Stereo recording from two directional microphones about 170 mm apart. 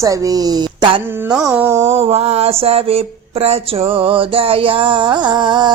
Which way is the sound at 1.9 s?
35° right (ahead or behind).